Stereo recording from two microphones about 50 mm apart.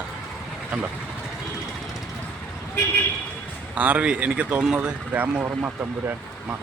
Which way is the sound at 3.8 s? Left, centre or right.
Right.